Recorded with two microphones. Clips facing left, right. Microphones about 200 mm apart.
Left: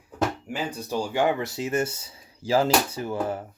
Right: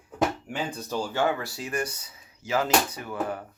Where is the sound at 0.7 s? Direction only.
10° left (ahead or behind).